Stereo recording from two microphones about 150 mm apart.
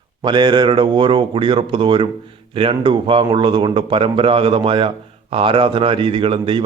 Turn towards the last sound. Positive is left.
turn(degrees=-35)  # may be behind; listen again after turning